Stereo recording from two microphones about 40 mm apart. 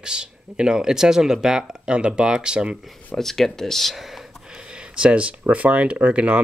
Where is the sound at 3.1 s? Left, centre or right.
Centre.